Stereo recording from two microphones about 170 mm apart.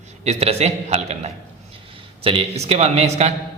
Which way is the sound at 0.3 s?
35° right (ahead or behind).